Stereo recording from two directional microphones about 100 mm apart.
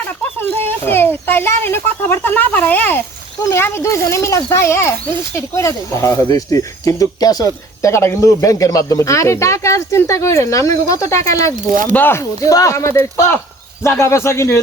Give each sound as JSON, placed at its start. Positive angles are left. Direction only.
{"t": 0.9, "sound": "a child's voice", "side_deg": 20}
{"t": 11.9, "sound": "speech", "side_deg": 20}
{"t": 12.5, "sound": "speech", "side_deg": 35}